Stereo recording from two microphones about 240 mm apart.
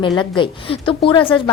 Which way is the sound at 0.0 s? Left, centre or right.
Centre.